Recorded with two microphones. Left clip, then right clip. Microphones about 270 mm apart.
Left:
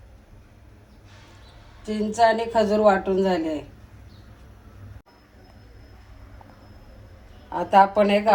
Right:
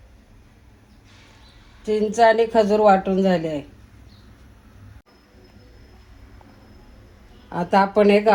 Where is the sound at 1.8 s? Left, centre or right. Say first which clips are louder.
Right 4 dB; right.